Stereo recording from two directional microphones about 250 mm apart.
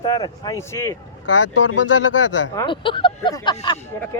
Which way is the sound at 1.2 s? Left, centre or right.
Left.